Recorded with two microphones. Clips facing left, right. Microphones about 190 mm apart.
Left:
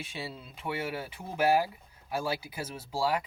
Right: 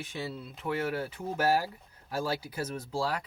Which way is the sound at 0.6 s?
15° left (ahead or behind).